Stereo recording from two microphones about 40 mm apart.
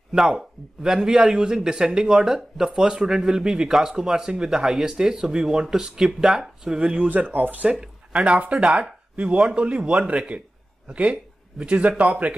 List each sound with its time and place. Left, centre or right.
0.8 s speech: centre
6.8 s speech: right
7.1 s speech: right
7.8 s a sound: right
8.4 s speech: right